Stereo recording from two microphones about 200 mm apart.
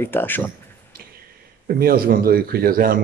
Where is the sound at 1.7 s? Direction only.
50° right (ahead or behind).